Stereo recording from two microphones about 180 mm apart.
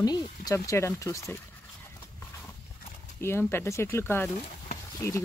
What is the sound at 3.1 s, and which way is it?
Speech, 15° left (ahead or behind).